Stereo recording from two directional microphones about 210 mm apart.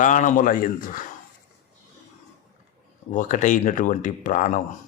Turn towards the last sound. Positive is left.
turn(degrees=35)  # may be behind; listen again after turning